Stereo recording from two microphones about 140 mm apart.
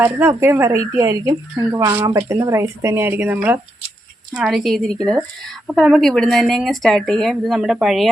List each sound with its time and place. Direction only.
0.0 s speech: 15° right (ahead or behind)
4.4 s a woman's voice: centre (ahead or behind)